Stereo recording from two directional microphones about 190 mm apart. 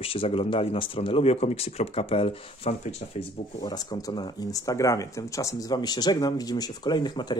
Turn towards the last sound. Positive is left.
turn(degrees=20)  # may be behind; listen again after turning